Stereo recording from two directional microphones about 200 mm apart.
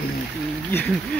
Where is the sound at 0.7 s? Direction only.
5° left (ahead or behind).